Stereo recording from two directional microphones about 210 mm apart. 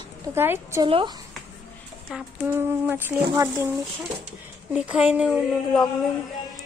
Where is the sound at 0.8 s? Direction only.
25° right (ahead or behind).